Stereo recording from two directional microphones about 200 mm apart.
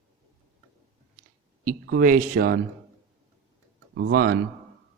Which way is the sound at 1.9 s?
45° right (ahead or behind).